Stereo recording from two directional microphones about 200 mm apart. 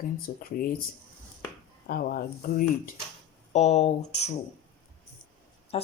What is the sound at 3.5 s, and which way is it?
Speech, 35° left (ahead or behind).